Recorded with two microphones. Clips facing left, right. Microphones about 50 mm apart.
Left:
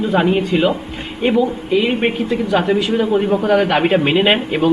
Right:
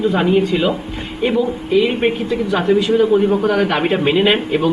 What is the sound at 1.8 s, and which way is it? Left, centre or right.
Speech, left.